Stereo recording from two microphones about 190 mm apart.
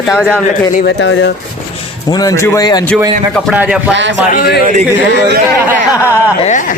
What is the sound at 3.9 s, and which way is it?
Speech, 70° right (ahead or behind).